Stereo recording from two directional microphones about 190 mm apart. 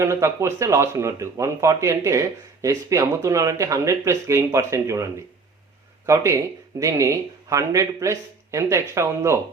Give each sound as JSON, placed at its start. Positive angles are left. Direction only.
{"t": 0.0, "sound": "speech", "side_deg": -15}
{"t": 6.1, "sound": "speech", "side_deg": -15}